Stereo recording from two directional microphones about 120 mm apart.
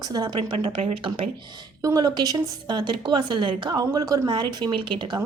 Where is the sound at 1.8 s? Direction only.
30° right (ahead or behind).